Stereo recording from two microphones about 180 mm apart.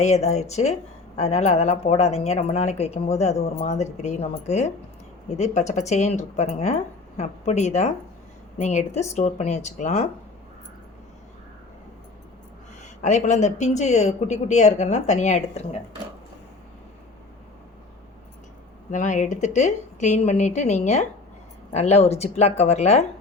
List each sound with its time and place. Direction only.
0.0 s speech: 40° left (ahead or behind)
12.8 s speech: 40° left (ahead or behind)
18.9 s speech: 45° left (ahead or behind)